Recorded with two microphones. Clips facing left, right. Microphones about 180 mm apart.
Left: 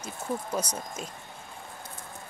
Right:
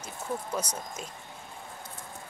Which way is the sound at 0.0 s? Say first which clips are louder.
Left 2 dB; 10° left (ahead or behind).